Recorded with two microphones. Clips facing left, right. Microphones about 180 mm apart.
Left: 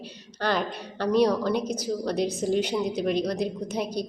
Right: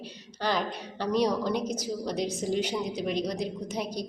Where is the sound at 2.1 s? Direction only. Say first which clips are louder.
Left 4 dB; 60° left (ahead or behind).